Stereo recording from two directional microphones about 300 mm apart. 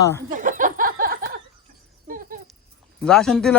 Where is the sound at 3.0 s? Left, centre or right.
Centre.